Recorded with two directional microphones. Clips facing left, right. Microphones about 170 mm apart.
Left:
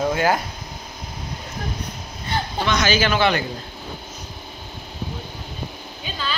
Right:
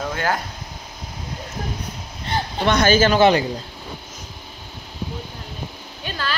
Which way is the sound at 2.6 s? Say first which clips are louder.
Right 5 dB; 55° right (ahead or behind).